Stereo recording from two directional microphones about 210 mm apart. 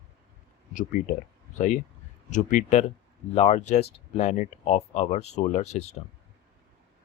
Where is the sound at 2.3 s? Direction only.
35° left (ahead or behind).